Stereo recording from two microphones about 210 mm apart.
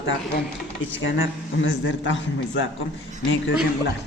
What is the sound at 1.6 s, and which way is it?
A man's voice, 60° left (ahead or behind).